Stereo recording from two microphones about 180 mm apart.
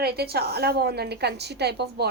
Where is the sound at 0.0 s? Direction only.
60° right (ahead or behind).